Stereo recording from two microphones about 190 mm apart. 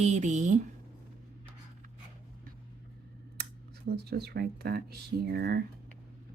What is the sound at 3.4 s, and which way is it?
Speech, 55° right (ahead or behind).